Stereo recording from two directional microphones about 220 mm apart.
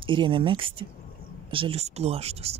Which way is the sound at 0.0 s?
20° right (ahead or behind).